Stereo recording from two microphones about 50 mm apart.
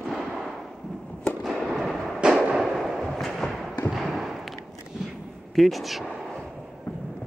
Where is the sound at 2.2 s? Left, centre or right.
Centre.